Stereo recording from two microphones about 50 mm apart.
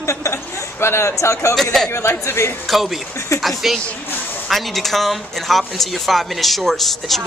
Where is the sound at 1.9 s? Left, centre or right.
Left.